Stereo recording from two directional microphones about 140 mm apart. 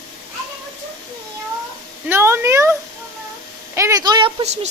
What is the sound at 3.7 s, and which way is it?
Speech, 20° right (ahead or behind).